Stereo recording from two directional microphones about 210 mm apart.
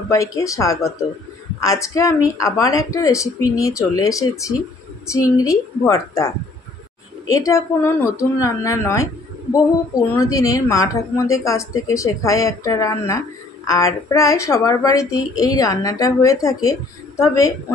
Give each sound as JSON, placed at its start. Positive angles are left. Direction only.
{"t": 0.1, "sound": "a woman's voice", "side_deg": 15}